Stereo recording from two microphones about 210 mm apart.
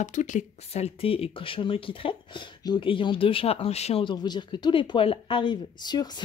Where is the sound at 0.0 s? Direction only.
35° left (ahead or behind).